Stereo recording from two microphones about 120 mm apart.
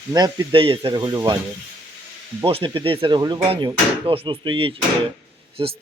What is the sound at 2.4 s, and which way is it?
Speech, 50° right (ahead or behind).